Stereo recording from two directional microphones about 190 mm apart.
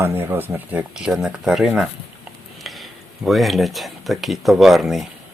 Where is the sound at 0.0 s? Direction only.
10° right (ahead or behind).